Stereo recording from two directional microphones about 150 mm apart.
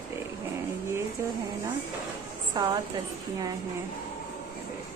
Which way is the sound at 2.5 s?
30° right (ahead or behind).